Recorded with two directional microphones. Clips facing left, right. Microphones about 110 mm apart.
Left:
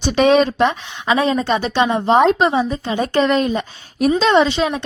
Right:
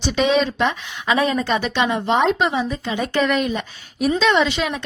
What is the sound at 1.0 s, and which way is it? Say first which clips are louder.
Speech: left 2 dB; 25° left (ahead or behind).